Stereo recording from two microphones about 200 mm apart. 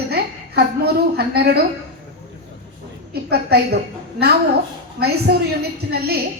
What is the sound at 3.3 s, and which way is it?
Speech, 55° right (ahead or behind).